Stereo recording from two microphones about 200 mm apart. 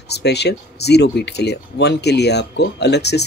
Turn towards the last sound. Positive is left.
turn(degrees=55)  # may be behind; listen again after turning